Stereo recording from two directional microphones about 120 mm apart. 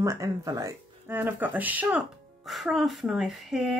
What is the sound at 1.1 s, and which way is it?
Speech, 15° right (ahead or behind).